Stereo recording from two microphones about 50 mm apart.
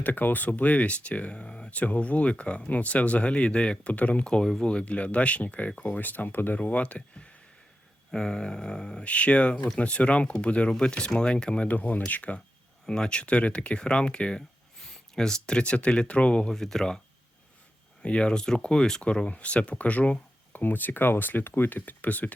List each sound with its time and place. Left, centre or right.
0.0 s speech: left
4.3 s speech: centre
12.8 s speech: centre
16.5 s speech: centre
18.0 s speech: left